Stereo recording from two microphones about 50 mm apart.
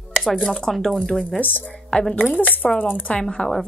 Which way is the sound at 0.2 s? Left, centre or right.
Centre.